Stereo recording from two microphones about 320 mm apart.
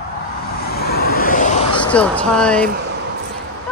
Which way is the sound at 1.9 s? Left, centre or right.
Centre.